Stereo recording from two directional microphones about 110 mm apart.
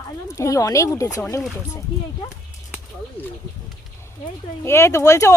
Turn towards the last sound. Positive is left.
turn(degrees=25)  # may be behind; listen again after turning